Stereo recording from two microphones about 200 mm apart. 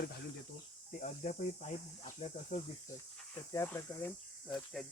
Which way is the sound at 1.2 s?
40° left (ahead or behind).